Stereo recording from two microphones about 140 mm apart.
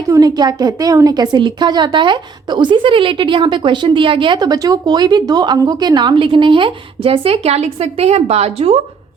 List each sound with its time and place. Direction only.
0.1 s a woman's voice: 25° right (ahead or behind); by 8.8 s 45° right (ahead or behind)